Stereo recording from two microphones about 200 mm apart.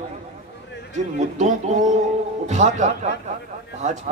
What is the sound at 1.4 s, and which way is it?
A man's voice, 35° right (ahead or behind).